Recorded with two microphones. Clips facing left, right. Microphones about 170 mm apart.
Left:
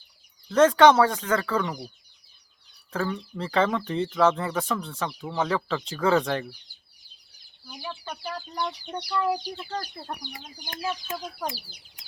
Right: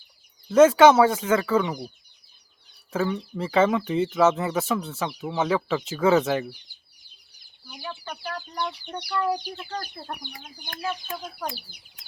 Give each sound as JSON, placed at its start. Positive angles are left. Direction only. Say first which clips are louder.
{"t": 0.4, "sound": "speech", "louder": "right 2 dB", "side_deg": -10}
{"t": 2.9, "sound": "speech", "louder": "right 3 dB", "side_deg": -5}
{"t": 7.7, "sound": "speech", "louder": "even", "side_deg": 0}
{"t": 11.1, "sound": "speech", "louder": "left 1 dB", "side_deg": 5}
{"t": 11.5, "sound": "speech", "louder": "right 1 dB", "side_deg": -55}